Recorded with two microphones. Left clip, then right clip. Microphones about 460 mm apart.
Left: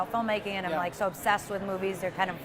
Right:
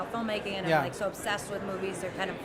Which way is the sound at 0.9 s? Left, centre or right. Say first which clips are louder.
Left 4 dB; left.